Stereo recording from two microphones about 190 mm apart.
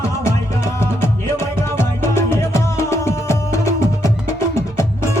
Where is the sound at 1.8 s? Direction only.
15° left (ahead or behind).